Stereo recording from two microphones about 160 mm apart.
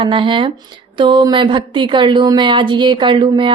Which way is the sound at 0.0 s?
30° right (ahead or behind).